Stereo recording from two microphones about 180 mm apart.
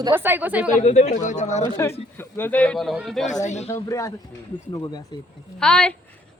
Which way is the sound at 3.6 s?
15° left (ahead or behind).